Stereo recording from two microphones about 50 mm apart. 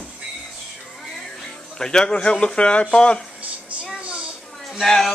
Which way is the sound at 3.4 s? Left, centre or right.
Right.